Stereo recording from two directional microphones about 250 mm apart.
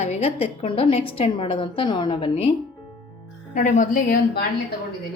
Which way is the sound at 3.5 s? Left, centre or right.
Left.